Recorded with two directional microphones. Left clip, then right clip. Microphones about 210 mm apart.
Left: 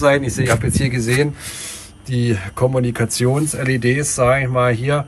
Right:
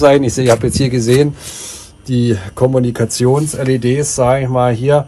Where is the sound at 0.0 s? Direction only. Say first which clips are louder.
Right 6 dB; 15° right (ahead or behind).